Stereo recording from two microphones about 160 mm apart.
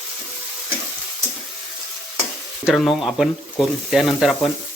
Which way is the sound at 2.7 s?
Centre (ahead or behind).